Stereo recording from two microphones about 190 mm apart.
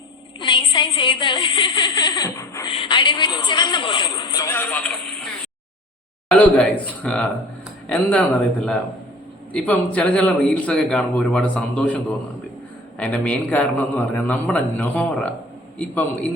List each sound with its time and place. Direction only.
0.3 s a woman's voice: 25° left (ahead or behind); by 4.9 s 10° left (ahead or behind)
6.2 s a man's voice: 5° left (ahead or behind)
9.5 s a man's voice: 5° left (ahead or behind)
13.0 s a man's voice: 10° left (ahead or behind)